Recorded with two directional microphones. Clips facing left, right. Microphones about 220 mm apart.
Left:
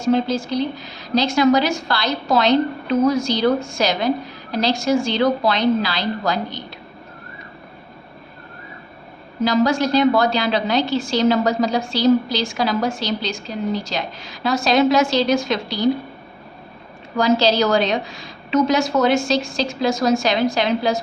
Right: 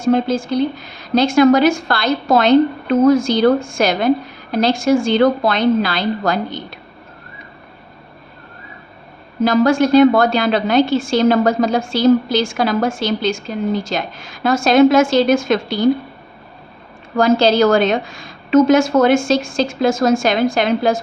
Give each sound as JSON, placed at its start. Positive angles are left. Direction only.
{"t": 0.0, "sound": "a woman's voice", "side_deg": -50}
{"t": 9.4, "sound": "a woman's voice", "side_deg": -50}
{"t": 17.2, "sound": "a woman's voice", "side_deg": -50}